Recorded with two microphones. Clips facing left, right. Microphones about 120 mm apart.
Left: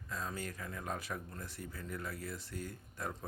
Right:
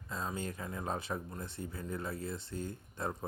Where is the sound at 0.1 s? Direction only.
25° right (ahead or behind).